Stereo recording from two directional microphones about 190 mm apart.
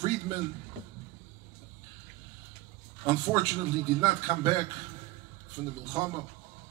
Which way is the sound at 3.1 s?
20° right (ahead or behind).